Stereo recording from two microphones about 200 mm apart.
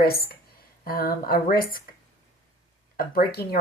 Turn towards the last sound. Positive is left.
turn(degrees=50)  # may be behind; listen again after turning